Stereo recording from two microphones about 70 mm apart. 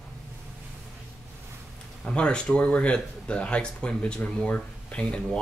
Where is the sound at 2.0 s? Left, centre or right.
Centre.